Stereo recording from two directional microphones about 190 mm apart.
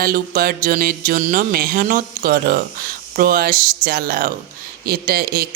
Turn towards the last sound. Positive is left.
turn(degrees=-50)  # may be behind; listen again after turning